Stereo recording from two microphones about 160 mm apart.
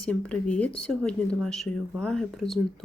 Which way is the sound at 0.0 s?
5° left (ahead or behind).